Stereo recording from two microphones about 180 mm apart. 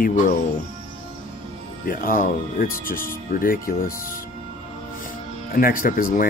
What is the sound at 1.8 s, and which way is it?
Speech, 50° left (ahead or behind).